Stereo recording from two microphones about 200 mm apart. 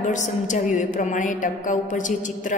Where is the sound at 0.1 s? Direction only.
40° left (ahead or behind).